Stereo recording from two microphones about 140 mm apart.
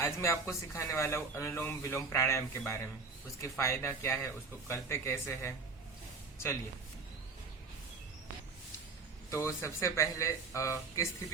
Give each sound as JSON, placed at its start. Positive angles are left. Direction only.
{"t": 0.0, "sound": "speech", "side_deg": 20}
{"t": 9.3, "sound": "speech", "side_deg": 20}